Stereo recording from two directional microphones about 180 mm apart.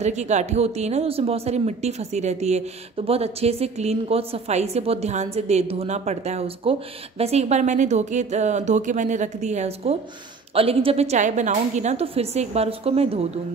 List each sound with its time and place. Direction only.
0.0 s a woman's voice: 40° right (ahead or behind)